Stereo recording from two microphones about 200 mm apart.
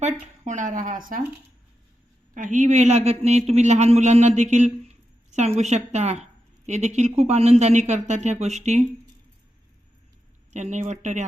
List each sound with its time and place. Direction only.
0.0 s speech: 40° right (ahead or behind)
2.3 s a man's voice: 40° right (ahead or behind)
10.5 s a man's voice: 35° right (ahead or behind)